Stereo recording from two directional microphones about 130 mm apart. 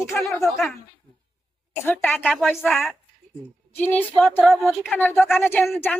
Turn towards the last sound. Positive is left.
turn(degrees=15)  # may be behind; listen again after turning